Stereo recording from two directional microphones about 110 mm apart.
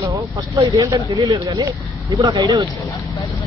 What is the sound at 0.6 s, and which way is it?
Speech, 35° right (ahead or behind).